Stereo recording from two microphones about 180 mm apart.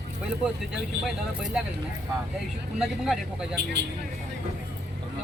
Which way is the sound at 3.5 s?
70° right (ahead or behind).